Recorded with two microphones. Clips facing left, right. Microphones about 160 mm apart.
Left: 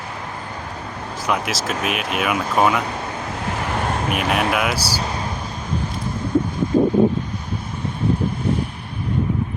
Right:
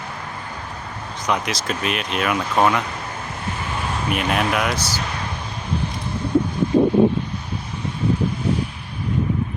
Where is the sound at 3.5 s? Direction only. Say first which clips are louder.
Left 5 dB; 75° left (ahead or behind).